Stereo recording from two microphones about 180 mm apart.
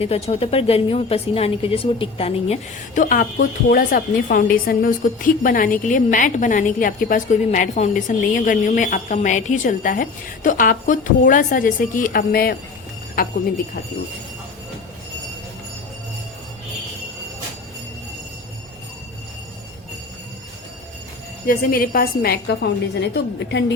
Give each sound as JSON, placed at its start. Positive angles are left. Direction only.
{"t": 0.0, "sound": "a woman's voice", "side_deg": 35}
{"t": 21.4, "sound": "a woman's voice", "side_deg": 55}